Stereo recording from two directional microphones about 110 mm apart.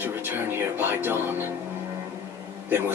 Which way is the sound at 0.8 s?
20° right (ahead or behind).